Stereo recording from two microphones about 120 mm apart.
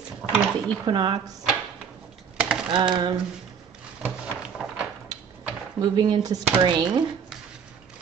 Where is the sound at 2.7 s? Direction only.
40° right (ahead or behind).